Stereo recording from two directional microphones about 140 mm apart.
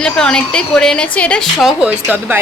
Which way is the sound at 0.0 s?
5° left (ahead or behind).